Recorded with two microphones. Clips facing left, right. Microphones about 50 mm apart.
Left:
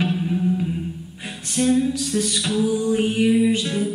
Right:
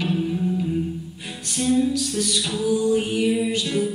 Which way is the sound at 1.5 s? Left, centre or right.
Left.